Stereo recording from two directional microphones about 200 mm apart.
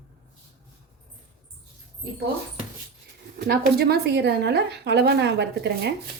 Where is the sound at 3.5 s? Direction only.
50° right (ahead or behind).